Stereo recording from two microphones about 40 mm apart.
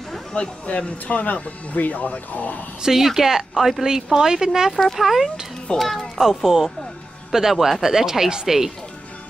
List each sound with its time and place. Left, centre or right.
0.3 s speech: left
2.8 s speech: centre
4.6 s a child's voice: centre
6.2 s speech: centre